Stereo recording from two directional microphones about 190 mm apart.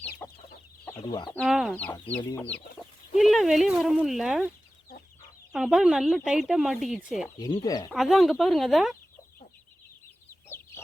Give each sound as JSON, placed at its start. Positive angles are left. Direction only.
{"t": 0.2, "sound": "chicken", "side_deg": 10}
{"t": 1.5, "sound": "speech", "side_deg": 0}
{"t": 1.7, "sound": "speech", "side_deg": 10}
{"t": 7.3, "sound": "speech", "side_deg": 20}
{"t": 7.9, "sound": "speech", "side_deg": 0}